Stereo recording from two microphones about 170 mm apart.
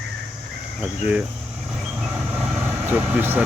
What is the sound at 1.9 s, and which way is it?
Vehicle, 10° right (ahead or behind).